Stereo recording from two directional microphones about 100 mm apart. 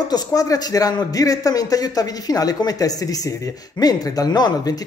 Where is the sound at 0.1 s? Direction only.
35° left (ahead or behind).